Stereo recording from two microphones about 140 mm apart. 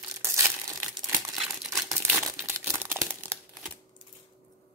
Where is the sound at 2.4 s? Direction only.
20° right (ahead or behind).